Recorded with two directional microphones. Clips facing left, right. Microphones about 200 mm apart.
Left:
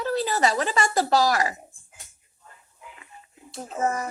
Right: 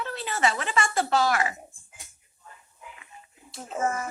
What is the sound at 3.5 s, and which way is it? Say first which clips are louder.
Speech: left 2 dB; 35° left (ahead or behind).